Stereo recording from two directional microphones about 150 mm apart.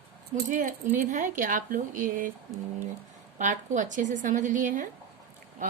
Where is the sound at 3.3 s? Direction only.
55° right (ahead or behind).